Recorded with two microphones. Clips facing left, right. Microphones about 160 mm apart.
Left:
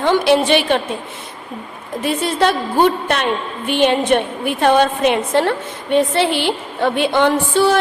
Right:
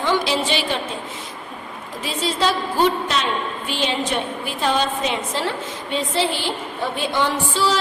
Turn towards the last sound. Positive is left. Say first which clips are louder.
# left 7 dB
turn(degrees=55)  # may be behind; listen again after turning